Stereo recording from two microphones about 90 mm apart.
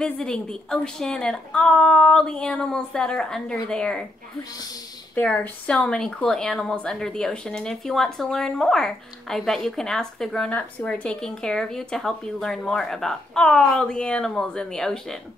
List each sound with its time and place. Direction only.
0.0 s speech: 10° left (ahead or behind)
5.1 s speech: 15° left (ahead or behind)
10.5 s speech: 15° left (ahead or behind)